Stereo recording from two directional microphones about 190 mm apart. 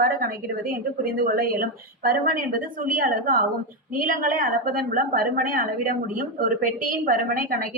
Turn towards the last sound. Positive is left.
turn(degrees=-50)  # may be behind; listen again after turning